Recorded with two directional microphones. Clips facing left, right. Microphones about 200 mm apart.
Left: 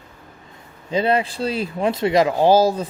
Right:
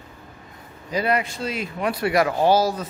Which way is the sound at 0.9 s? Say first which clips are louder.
Left 4 dB; 25° left (ahead or behind).